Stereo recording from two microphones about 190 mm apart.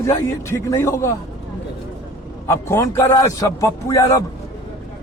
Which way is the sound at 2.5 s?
15° left (ahead or behind).